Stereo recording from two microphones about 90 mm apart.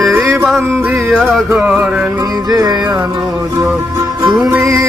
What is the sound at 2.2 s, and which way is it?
Music, 45° right (ahead or behind).